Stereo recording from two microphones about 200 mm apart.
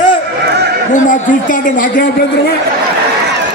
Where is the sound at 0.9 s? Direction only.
40° left (ahead or behind).